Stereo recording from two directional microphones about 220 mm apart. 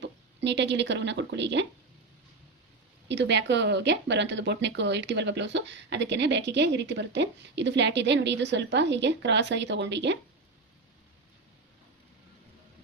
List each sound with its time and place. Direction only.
0.0 s speech: 50° right (ahead or behind)
3.1 s speech: 50° right (ahead or behind)